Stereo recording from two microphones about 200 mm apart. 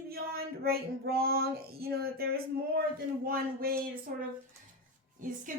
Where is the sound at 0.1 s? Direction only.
50° right (ahead or behind).